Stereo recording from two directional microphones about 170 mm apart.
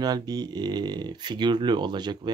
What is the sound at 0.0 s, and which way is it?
Speech, 25° right (ahead or behind).